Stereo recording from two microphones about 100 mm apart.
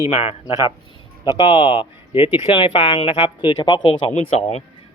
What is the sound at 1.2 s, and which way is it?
Speech, 50° left (ahead or behind).